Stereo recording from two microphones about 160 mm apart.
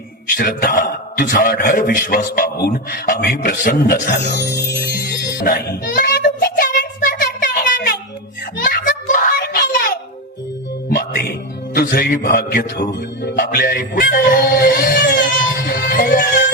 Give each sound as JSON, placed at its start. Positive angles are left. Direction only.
{"t": 0.3, "sound": "a man's voice", "side_deg": 60}
{"t": 4.9, "sound": "music", "side_deg": 75}
{"t": 8.5, "sound": "children playing", "side_deg": 60}
{"t": 10.8, "sound": "music", "side_deg": 65}
{"t": 11.7, "sound": "a man's voice", "side_deg": 70}
{"t": 13.3, "sound": "music", "side_deg": 60}